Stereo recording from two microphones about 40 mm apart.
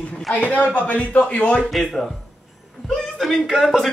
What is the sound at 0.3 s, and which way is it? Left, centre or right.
Speech, left.